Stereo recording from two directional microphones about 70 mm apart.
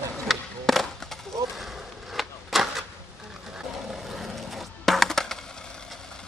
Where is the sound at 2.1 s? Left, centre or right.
Centre.